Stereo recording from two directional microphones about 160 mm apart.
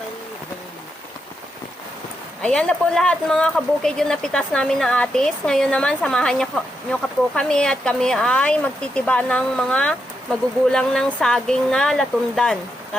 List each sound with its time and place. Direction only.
2.4 s speech: 5° left (ahead or behind)